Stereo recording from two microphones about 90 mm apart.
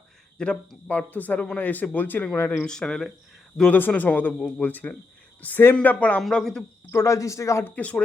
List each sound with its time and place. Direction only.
0.3 s speech: 5° left (ahead or behind)
0.9 s speech: 20° left (ahead or behind)
2.6 s speech: 10° left (ahead or behind)
3.7 s speech: 20° left (ahead or behind)
4.4 s speech: 10° left (ahead or behind)
4.6 s speech: 20° left (ahead or behind)
6.2 s speech: 5° left (ahead or behind)
6.9 s speech: 35° left (ahead or behind)
7.6 s speech: 15° left (ahead or behind)